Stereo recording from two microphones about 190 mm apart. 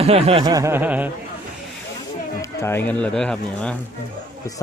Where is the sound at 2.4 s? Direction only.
15° left (ahead or behind).